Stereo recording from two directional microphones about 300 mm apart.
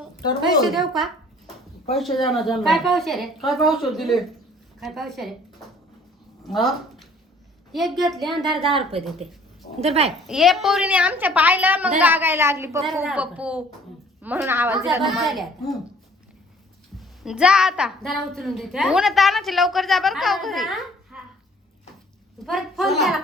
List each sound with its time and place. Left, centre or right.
0.6 s a woman's voice: centre
8.4 s a woman's voice: centre
10.2 s a woman's voice: centre
17.0 s a woman's voice: centre
22.4 s a woman's voice: centre